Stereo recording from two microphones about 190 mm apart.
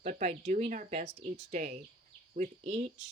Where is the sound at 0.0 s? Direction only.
40° right (ahead or behind).